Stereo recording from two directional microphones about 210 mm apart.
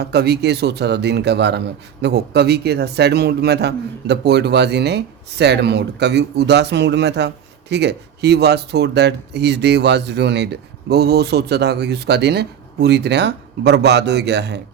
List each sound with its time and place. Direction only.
0.0 s a man's voice: 50° right (ahead or behind)